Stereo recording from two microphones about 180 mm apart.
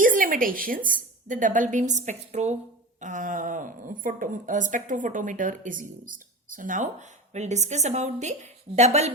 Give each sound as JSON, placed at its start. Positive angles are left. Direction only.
{"t": 0.0, "sound": "a woman's voice", "side_deg": -50}